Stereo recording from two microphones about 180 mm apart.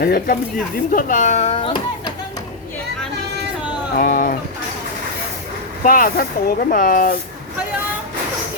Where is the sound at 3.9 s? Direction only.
50° left (ahead or behind).